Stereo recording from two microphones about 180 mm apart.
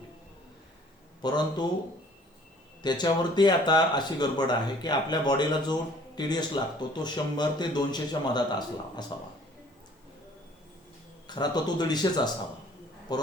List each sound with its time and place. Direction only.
1.2 s speech: 25° left (ahead or behind)
2.8 s speech: 25° left (ahead or behind)
11.3 s speech: 25° left (ahead or behind)